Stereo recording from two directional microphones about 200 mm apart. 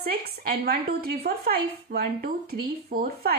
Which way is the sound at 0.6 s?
50° right (ahead or behind).